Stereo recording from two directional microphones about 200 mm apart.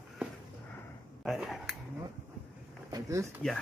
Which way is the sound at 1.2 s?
Centre (ahead or behind).